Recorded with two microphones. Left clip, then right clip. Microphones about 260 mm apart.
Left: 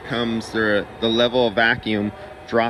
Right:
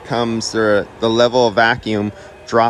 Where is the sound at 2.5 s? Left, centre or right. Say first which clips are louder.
Right 6 dB; left.